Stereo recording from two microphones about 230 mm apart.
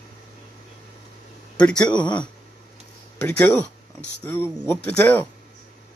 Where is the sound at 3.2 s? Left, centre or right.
Centre.